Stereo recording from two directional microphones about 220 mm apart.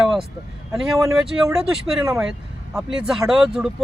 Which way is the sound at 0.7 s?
Centre (ahead or behind).